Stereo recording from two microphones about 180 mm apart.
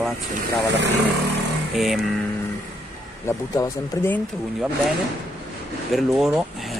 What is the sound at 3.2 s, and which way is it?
Speech, 15° left (ahead or behind).